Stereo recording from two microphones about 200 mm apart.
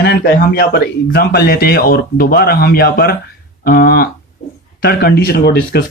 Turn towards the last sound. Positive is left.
turn(degrees=55)  # may be behind; listen again after turning